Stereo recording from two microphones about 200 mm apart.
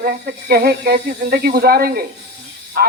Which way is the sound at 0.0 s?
50° right (ahead or behind).